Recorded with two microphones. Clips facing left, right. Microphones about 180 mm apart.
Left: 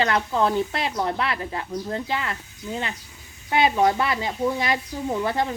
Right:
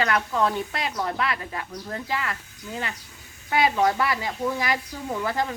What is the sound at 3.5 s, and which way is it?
Speech, 25° left (ahead or behind).